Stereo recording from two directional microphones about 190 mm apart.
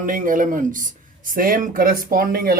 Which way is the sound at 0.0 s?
45° right (ahead or behind).